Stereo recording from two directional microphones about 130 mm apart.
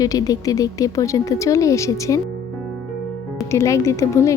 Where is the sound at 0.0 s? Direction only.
30° left (ahead or behind).